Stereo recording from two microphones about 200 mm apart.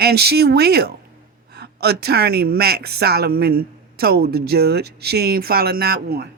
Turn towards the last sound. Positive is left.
turn(degrees=-55)  # may be behind; listen again after turning